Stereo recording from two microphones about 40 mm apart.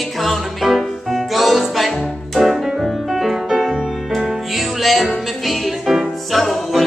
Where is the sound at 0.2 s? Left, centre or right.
Centre.